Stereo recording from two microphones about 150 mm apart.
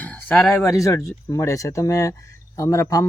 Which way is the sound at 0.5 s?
20° left (ahead or behind).